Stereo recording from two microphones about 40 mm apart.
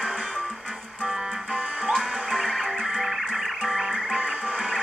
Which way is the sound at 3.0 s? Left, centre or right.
Centre.